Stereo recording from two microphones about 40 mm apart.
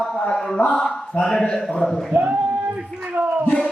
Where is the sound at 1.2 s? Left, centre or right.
Centre.